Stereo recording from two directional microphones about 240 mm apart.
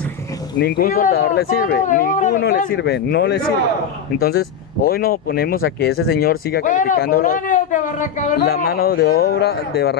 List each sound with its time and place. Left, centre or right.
0.6 s speech: left